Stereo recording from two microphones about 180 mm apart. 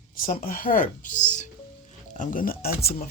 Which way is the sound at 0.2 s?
50° left (ahead or behind).